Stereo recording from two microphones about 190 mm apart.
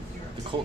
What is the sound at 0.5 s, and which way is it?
Speech, 25° right (ahead or behind).